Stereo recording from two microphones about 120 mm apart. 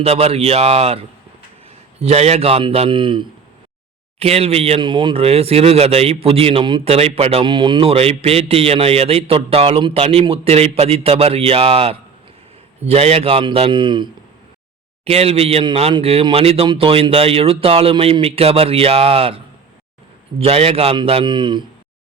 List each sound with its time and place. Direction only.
0.0 s a man's voice: 55° right (ahead or behind)
4.2 s a man's voice: 55° right (ahead or behind)
7.4 s a man's voice: 40° right (ahead or behind)
15.0 s speech: 55° right (ahead or behind)
20.4 s speech: 55° right (ahead or behind)